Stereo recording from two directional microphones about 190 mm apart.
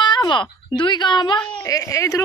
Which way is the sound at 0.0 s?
25° left (ahead or behind).